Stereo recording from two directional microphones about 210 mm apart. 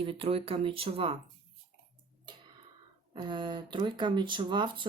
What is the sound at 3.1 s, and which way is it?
Speech, 20° right (ahead or behind).